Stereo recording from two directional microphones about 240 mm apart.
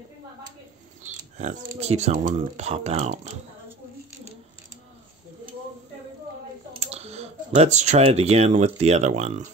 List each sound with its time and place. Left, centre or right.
1.4 s speech: right
6.8 s speech: right